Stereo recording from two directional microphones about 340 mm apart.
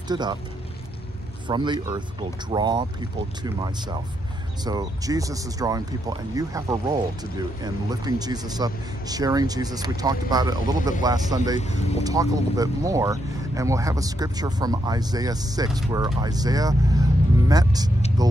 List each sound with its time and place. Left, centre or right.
0.1 s speech: centre
1.5 s speech: centre
11.6 s speech: centre
12.0 s speech: centre